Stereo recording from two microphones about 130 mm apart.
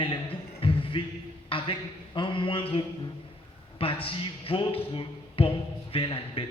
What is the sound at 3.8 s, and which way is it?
Speech, 45° left (ahead or behind).